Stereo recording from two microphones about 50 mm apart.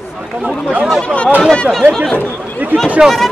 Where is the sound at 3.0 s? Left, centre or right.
Centre.